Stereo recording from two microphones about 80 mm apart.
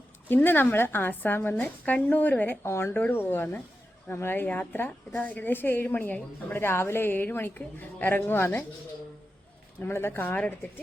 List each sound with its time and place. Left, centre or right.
0.3 s speech: left
2.6 s speech: left
9.8 s speech: left